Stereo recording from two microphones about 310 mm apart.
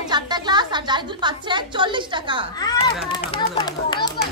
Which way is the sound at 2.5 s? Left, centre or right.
Centre.